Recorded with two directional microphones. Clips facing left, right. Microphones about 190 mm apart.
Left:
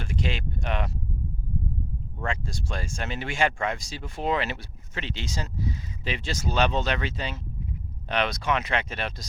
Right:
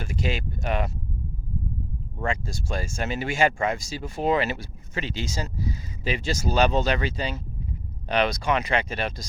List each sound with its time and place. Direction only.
0.0 s speech: 5° right (ahead or behind)
2.2 s speech: 5° right (ahead or behind)